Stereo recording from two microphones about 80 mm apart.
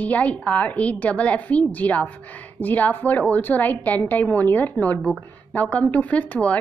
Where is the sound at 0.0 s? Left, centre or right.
Centre.